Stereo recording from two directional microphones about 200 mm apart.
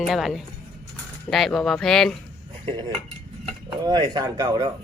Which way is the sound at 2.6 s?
20° right (ahead or behind).